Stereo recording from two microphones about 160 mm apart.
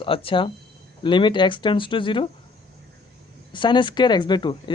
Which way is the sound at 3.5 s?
30° left (ahead or behind).